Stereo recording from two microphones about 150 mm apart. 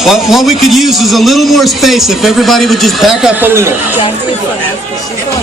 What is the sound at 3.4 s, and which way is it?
Speech, 15° right (ahead or behind).